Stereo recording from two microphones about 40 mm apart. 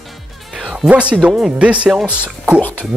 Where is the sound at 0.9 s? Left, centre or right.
Right.